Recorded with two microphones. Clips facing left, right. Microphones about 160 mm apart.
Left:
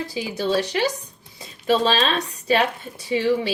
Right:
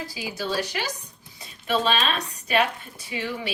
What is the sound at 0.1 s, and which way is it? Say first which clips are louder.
A woman's voice: left 8 dB; 25° left (ahead or behind).